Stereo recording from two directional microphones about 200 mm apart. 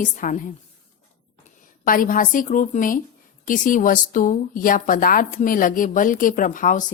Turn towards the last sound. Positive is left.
turn(degrees=40)  # may be behind; listen again after turning